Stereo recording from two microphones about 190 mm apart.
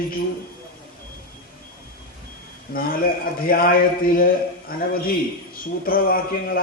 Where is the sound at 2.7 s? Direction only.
50° left (ahead or behind).